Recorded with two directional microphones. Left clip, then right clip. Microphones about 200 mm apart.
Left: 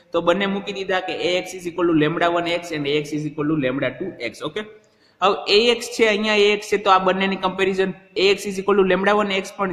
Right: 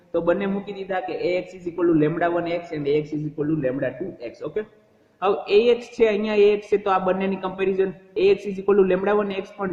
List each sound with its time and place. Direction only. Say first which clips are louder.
0.1 s a man's voice: left 3 dB; 30° left (ahead or behind)
5.2 s a man's voice: left 2 dB; 25° left (ahead or behind)